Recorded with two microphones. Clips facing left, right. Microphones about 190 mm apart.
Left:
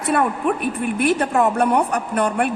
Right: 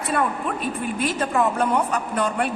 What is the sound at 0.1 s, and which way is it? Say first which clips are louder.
A woman's voice: left 5 dB; 65° left (ahead or behind).